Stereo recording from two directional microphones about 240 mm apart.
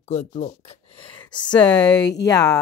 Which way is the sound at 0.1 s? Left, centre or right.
Left.